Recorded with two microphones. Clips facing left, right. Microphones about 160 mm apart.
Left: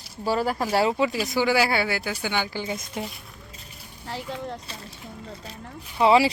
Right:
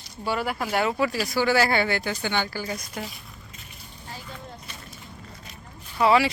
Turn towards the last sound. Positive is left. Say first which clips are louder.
# left 2 dB
turn(degrees=25)  # may be behind; listen again after turning